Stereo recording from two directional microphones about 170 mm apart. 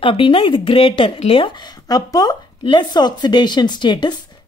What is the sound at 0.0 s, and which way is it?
Speech, 30° left (ahead or behind).